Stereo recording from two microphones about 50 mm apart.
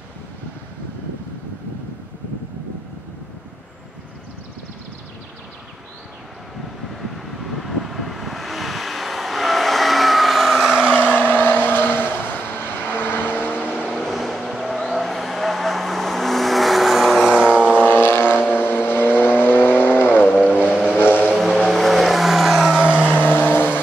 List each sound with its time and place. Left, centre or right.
6.9 s vehicle: centre
10.7 s vehicle: centre
11.1 s vehicle: left
13.9 s vehicle: centre; by 17.8 s right
17.8 s vehicle: left
21.4 s vehicle: centre
23.2 s vehicle: left